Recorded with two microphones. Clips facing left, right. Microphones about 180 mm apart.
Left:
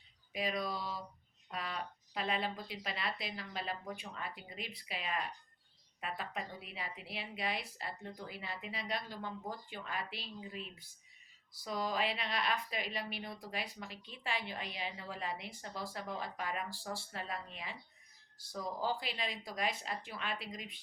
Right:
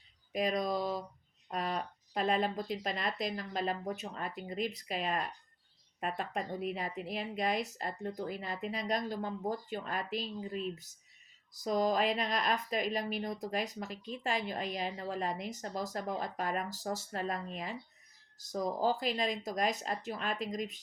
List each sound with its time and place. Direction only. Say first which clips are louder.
0.3 s a woman's voice: right 6 dB; 45° right (ahead or behind)